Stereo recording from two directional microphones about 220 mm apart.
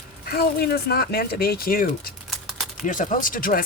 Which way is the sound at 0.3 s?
45° left (ahead or behind).